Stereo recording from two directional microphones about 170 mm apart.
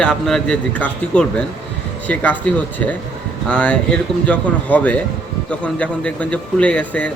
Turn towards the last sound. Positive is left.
turn(degrees=5)  # may be behind; listen again after turning